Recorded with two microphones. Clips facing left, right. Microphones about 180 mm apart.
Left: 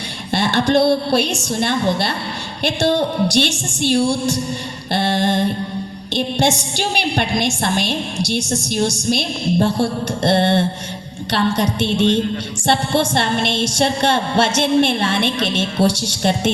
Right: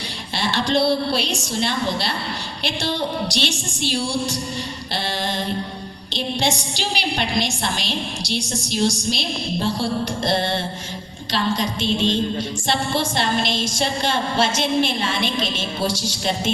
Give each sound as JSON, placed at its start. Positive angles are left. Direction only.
{"t": 0.3, "sound": "a woman's voice", "side_deg": 55}